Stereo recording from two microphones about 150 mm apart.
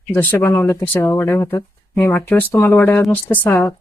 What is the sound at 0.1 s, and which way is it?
Speech, 15° left (ahead or behind).